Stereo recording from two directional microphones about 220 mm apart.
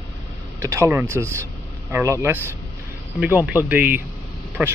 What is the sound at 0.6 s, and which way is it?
Speech, 15° right (ahead or behind).